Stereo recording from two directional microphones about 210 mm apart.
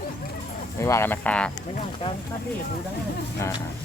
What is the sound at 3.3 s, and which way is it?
Speech, 15° left (ahead or behind).